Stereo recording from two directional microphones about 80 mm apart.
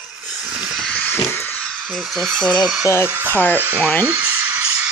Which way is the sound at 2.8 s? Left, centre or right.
Left.